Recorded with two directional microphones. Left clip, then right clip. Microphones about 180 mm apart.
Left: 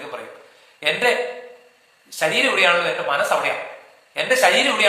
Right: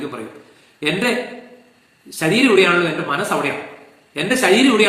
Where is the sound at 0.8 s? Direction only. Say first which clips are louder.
Left 1 dB; 10° left (ahead or behind).